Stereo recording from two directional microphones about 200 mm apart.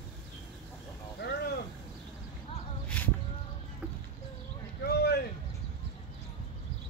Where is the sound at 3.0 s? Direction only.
5° left (ahead or behind).